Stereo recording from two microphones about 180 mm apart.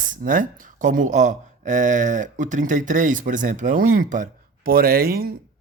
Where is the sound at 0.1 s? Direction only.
45° right (ahead or behind).